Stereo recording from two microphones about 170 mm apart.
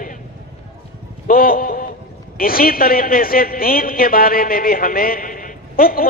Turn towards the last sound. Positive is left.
turn(degrees=60)  # may be behind; listen again after turning